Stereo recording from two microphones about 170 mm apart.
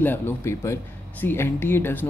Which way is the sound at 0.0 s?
10° left (ahead or behind).